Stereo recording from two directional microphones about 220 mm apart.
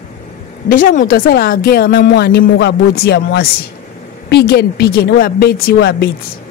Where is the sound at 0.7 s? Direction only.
40° left (ahead or behind).